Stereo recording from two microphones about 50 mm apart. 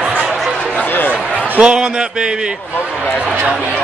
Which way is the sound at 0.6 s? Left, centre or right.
Left.